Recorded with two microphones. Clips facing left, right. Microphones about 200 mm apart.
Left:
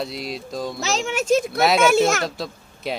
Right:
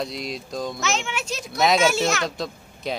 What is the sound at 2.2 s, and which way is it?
Speech, 5° left (ahead or behind).